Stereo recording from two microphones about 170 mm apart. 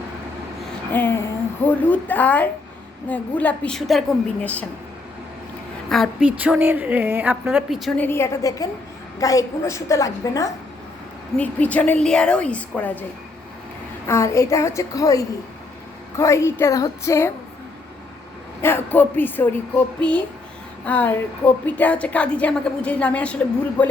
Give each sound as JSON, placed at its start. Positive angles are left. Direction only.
{"t": 0.9, "sound": "speech", "side_deg": 10}
{"t": 5.9, "sound": "a woman's voice", "side_deg": 0}
{"t": 11.3, "sound": "speech", "side_deg": 10}
{"t": 14.1, "sound": "speech", "side_deg": 15}
{"t": 18.6, "sound": "speech", "side_deg": 10}